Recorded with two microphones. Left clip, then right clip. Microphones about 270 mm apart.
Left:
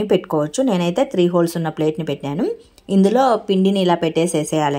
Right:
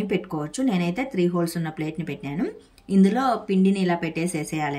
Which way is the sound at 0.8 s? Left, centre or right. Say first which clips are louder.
Left 8 dB; left.